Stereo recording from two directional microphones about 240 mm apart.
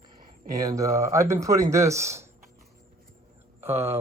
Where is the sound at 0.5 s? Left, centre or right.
Centre.